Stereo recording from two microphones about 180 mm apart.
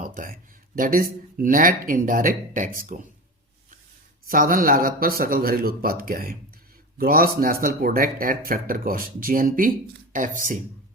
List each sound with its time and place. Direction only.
0.0 s a sound: 50° right (ahead or behind)
0.8 s speech: 50° right (ahead or behind)
4.3 s speech: 50° right (ahead or behind)